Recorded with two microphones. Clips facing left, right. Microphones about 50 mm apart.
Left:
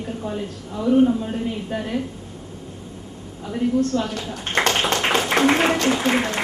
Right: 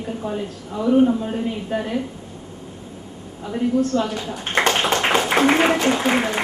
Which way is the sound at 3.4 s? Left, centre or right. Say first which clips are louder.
Right 1 dB; centre.